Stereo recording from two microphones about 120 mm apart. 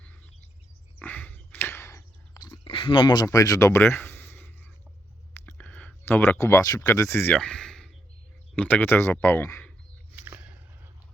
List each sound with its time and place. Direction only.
0.9 s chewing: 15° left (ahead or behind); by 2.6 s 30° left (ahead or behind)
2.6 s speech: 45° left (ahead or behind)
3.2 s speech: 30° left (ahead or behind)
5.5 s a sound: 10° left (ahead or behind)
6.4 s speech: 25° left (ahead or behind)
7.3 s a sound: 5° left (ahead or behind)
8.5 s speech: 10° left (ahead or behind)
10.2 s biting: 15° right (ahead or behind)